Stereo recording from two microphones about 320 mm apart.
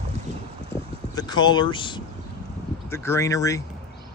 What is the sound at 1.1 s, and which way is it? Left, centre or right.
Speech, centre.